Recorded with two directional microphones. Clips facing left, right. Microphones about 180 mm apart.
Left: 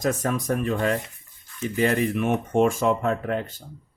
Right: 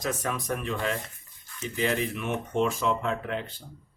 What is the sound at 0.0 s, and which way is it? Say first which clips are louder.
Speech: left 6 dB; 45° left (ahead or behind).